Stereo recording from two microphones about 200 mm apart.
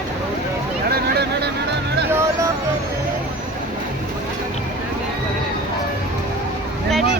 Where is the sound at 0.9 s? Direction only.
55° right (ahead or behind).